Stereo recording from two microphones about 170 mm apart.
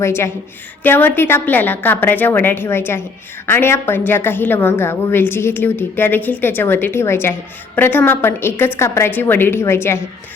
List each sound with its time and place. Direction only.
0.0 s a woman's voice: 15° left (ahead or behind)